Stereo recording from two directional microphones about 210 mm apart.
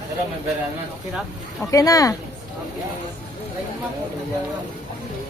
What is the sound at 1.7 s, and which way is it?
Speech, 15° left (ahead or behind).